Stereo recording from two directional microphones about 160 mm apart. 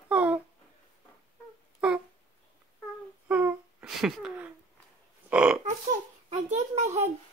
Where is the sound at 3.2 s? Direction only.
10° right (ahead or behind).